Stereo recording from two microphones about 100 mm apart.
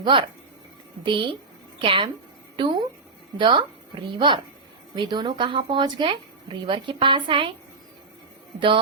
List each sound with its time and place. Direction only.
0.0 s speech: 55° right (ahead or behind)
4.9 s speech: 50° right (ahead or behind)
8.5 s speech: 55° right (ahead or behind)